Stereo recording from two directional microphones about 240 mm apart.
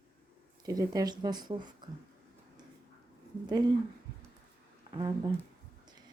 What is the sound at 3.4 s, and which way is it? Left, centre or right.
Speech, centre.